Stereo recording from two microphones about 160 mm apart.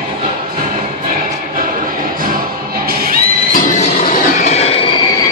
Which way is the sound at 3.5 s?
55° left (ahead or behind).